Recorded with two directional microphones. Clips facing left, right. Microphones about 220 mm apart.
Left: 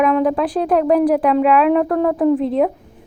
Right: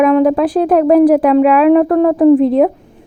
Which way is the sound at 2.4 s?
40° right (ahead or behind).